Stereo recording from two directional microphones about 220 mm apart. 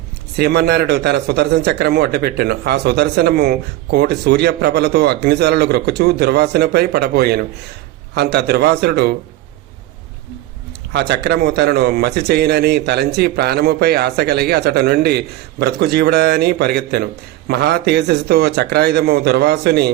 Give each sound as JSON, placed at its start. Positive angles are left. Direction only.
{"t": 0.3, "sound": "speech", "side_deg": -45}
{"t": 11.1, "sound": "speech", "side_deg": -50}